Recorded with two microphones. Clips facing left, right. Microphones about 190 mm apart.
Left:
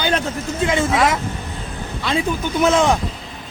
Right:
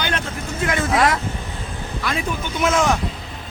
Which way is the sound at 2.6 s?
30° left (ahead or behind).